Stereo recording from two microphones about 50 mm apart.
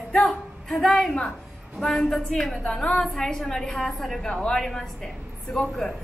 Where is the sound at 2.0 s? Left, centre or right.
Centre.